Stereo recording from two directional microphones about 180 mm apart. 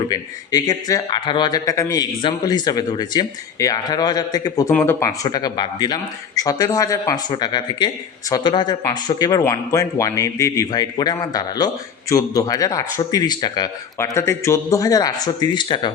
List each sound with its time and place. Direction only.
0.1 s speech: 20° left (ahead or behind)